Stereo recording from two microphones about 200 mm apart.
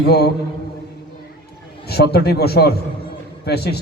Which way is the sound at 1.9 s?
55° left (ahead or behind).